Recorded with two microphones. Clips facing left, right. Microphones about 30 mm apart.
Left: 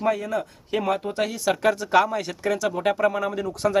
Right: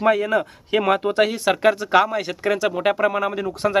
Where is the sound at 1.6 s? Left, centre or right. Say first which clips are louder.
Right 3 dB; right.